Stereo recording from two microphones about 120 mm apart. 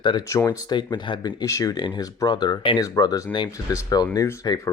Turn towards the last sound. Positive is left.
turn(degrees=25)  # may be behind; listen again after turning